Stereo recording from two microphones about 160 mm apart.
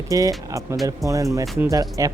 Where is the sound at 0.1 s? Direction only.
20° right (ahead or behind).